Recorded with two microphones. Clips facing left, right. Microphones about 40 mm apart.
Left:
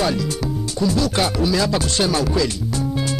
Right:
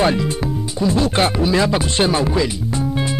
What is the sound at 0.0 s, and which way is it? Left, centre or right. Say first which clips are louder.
Speech: right 4 dB; right.